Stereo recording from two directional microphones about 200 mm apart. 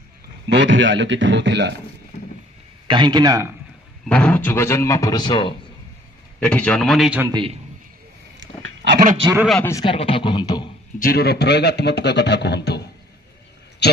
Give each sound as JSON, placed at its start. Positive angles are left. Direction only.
{"t": 0.5, "sound": "a man's voice", "side_deg": -65}
{"t": 2.9, "sound": "speech", "side_deg": -20}
{"t": 4.1, "sound": "speech", "side_deg": 5}
{"t": 6.4, "sound": "a man's voice", "side_deg": 5}
{"t": 7.2, "sound": "speech", "side_deg": -20}
{"t": 8.4, "sound": "pig", "side_deg": -60}
{"t": 9.6, "sound": "speech", "side_deg": 15}
{"t": 9.8, "sound": "speech", "side_deg": 25}
{"t": 11.0, "sound": "speech", "side_deg": 50}